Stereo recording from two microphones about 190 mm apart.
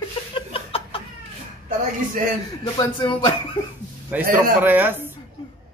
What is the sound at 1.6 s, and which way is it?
Speech, 45° right (ahead or behind).